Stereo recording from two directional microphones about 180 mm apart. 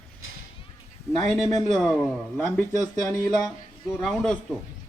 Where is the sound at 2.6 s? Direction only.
20° left (ahead or behind).